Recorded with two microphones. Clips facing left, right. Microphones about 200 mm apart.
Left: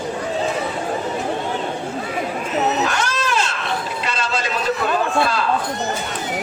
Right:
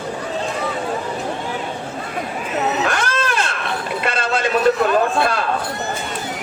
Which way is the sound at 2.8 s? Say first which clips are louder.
Right 1 dB; 55° right (ahead or behind).